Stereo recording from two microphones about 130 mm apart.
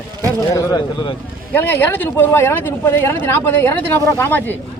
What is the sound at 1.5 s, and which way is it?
Speech, 15° left (ahead or behind).